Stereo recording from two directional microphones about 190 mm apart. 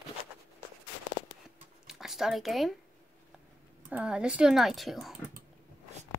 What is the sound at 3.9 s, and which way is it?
Speech, 5° right (ahead or behind).